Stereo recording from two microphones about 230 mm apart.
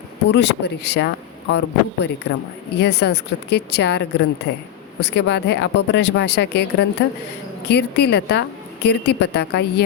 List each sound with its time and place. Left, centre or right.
0.3 s a woman's voice: left